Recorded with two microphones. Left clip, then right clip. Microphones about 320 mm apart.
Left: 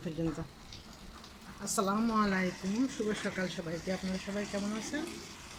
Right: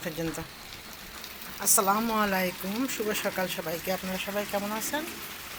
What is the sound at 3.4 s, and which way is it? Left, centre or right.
Speech, right.